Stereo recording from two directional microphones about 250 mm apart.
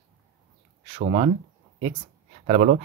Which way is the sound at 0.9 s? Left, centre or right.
Right.